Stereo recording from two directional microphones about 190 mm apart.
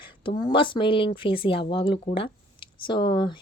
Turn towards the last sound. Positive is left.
turn(degrees=25)  # may be behind; listen again after turning